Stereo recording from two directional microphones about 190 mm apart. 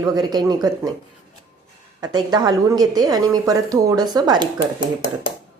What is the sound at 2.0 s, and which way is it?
A woman's voice, 20° right (ahead or behind).